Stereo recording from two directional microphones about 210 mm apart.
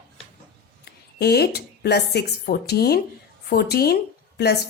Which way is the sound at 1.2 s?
50° left (ahead or behind).